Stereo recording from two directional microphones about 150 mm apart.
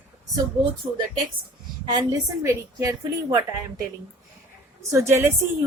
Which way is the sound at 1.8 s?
25° right (ahead or behind).